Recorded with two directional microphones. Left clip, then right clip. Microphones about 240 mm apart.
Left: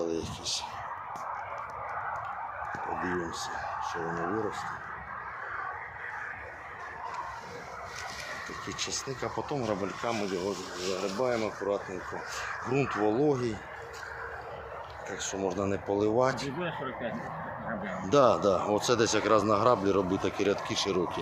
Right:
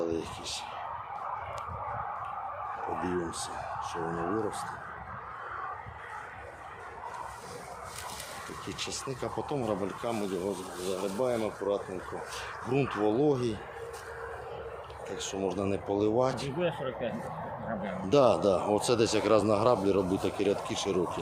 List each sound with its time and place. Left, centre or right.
0.0 s a sound: centre
3.0 s speech: centre
8.8 s speech: centre
11.2 s speech: centre
15.2 s speech: centre
16.6 s speech: right
18.0 s speech: centre